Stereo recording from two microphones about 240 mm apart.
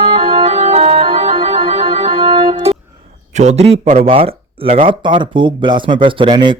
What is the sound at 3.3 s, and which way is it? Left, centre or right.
Speech, right.